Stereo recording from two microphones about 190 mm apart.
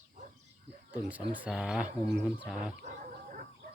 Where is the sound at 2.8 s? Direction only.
40° right (ahead or behind).